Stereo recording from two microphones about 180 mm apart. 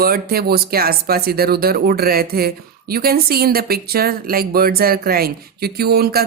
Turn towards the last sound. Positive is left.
turn(degrees=-60)  # may be behind; listen again after turning